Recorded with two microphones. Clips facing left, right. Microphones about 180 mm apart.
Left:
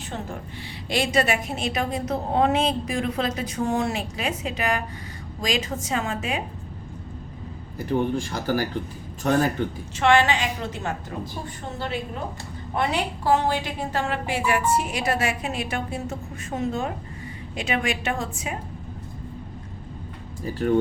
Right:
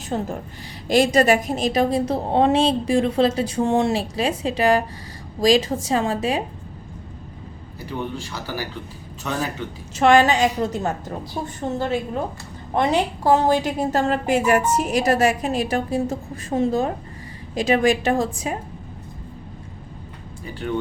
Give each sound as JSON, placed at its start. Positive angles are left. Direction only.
{"t": 0.9, "sound": "a woman's voice", "side_deg": -40}
{"t": 7.8, "sound": "a man's voice", "side_deg": 50}
{"t": 10.0, "sound": "a woman's voice", "side_deg": -40}
{"t": 20.4, "sound": "speech", "side_deg": 40}